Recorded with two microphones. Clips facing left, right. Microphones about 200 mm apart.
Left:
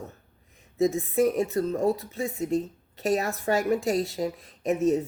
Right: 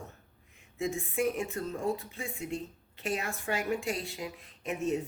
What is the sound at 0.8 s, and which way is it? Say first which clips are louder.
Speech: left 9 dB; 40° left (ahead or behind).